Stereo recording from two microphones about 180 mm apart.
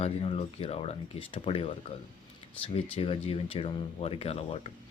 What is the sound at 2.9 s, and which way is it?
Speech, 30° left (ahead or behind).